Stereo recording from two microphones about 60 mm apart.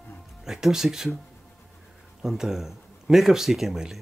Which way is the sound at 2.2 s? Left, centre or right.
Centre.